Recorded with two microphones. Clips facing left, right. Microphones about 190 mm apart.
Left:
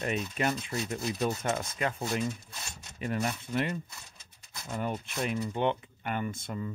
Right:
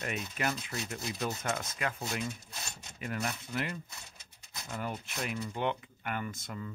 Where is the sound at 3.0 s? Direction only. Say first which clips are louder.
Left 5 dB; 25° left (ahead or behind).